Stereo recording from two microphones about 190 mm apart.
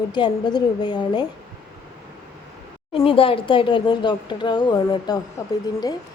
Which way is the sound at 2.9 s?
30° left (ahead or behind).